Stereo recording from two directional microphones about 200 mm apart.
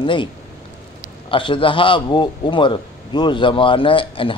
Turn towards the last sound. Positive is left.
turn(degrees=25)  # may be behind; listen again after turning